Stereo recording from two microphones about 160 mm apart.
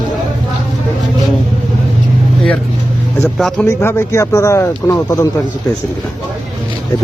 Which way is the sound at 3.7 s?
15° left (ahead or behind).